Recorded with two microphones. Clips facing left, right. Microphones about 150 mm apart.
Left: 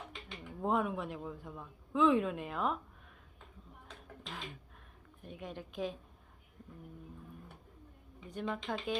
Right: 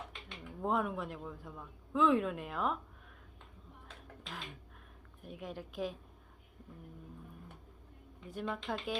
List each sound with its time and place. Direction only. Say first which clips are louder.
0.1 s speech: left 1 dB; centre (ahead or behind)
5.2 s a woman's voice: right 1 dB; centre (ahead or behind)
8.3 s a woman's voice: left 1 dB; centre (ahead or behind)